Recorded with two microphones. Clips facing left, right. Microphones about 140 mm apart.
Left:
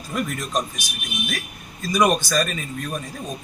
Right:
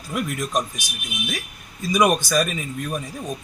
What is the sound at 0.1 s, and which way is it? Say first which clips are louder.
Speech: right 1 dB; 10° right (ahead or behind).